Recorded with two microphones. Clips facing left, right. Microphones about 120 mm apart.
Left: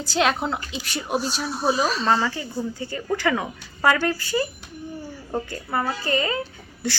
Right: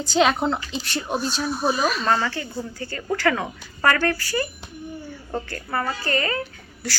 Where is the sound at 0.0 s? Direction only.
Centre (ahead or behind).